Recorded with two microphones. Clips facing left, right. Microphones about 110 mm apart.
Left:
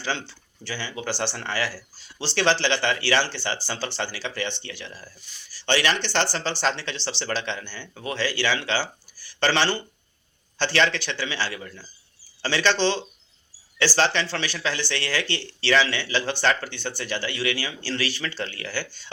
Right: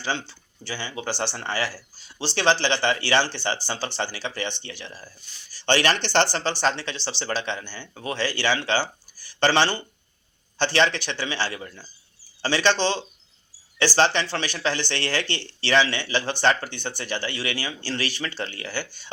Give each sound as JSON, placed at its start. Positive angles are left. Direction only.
{"t": 0.0, "sound": "speech", "side_deg": -15}
{"t": 5.6, "sound": "speech", "side_deg": -35}
{"t": 6.3, "sound": "speech", "side_deg": -20}
{"t": 12.7, "sound": "speech", "side_deg": -45}
{"t": 13.7, "sound": "speech", "side_deg": -20}